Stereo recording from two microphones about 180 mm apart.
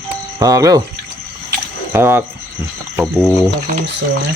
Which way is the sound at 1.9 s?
10° right (ahead or behind).